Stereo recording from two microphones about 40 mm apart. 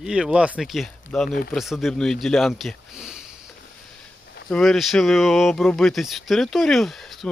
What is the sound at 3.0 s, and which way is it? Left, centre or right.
Sniff, centre.